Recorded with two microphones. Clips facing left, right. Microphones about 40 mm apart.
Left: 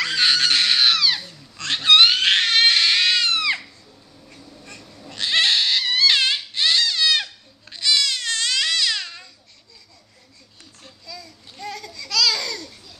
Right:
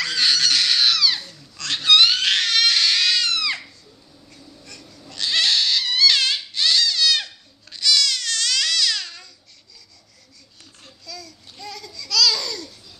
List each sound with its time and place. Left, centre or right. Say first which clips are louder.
0.0 s crying: left 1 dB; left
4.3 s goat: left 2 dB; left
7.7 s crying: even; left
11.1 s a sound: right 1 dB; centre
11.5 s babbling: left 3 dB; left